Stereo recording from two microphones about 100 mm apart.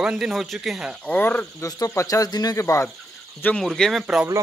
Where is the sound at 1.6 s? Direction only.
40° left (ahead or behind).